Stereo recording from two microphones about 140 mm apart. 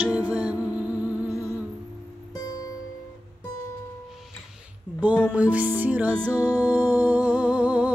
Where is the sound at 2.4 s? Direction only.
25° left (ahead or behind).